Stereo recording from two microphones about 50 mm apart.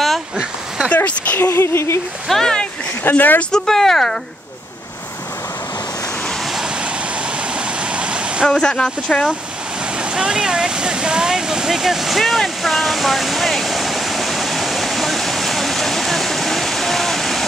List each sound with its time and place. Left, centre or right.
0.4 s a sound: centre
0.9 s a sound: left
1.4 s speech: left
2.2 s speech: centre
3.0 s speech: left
3.5 s speech: centre
7.5 s waterfall: centre
8.5 s speech: centre
9.9 s a sound: centre